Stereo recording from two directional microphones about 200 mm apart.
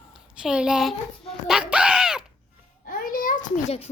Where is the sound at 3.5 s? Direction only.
30° left (ahead or behind).